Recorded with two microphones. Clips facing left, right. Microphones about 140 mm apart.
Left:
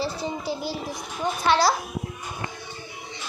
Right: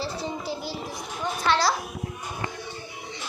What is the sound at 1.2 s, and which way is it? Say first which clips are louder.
Speech: left 3 dB; 10° left (ahead or behind).